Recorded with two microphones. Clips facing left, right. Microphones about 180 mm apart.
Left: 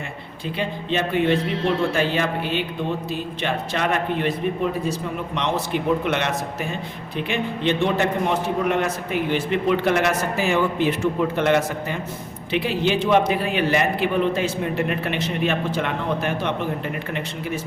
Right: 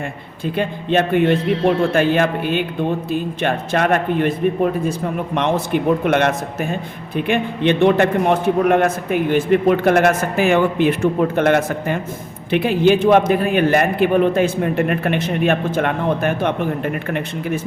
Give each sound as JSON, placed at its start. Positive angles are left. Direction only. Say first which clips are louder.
{"t": 0.5, "sound": "a man's voice", "louder": "right 6 dB", "side_deg": -55}